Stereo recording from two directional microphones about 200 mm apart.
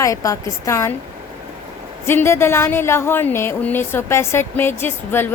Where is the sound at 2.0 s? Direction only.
10° left (ahead or behind).